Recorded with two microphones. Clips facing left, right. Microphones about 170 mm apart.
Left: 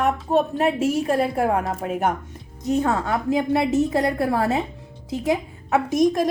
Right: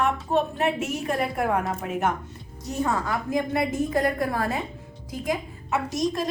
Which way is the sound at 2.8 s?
65° left (ahead or behind).